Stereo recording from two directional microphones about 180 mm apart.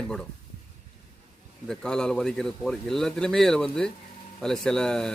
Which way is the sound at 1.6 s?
5° left (ahead or behind).